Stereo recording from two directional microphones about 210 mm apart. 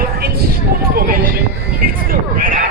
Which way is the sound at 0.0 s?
45° right (ahead or behind).